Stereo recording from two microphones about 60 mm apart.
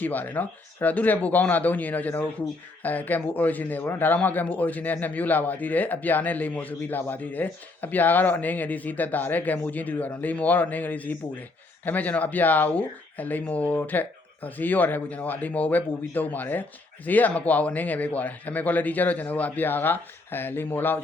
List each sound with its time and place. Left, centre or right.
0.0 s a man's voice: left